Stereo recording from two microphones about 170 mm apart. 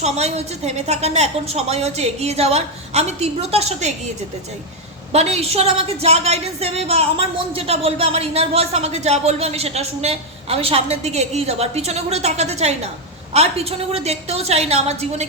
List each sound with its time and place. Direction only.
0.0 s a woman's voice: 40° right (ahead or behind)
5.1 s a woman's voice: 40° right (ahead or behind)